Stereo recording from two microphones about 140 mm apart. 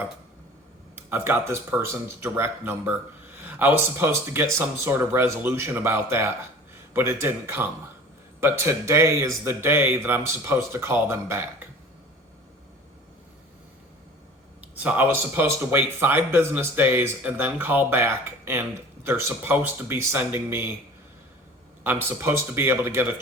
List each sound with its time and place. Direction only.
0.9 s speech: 15° right (ahead or behind)
14.6 s speech: 10° right (ahead or behind)
21.8 s speech: 15° right (ahead or behind)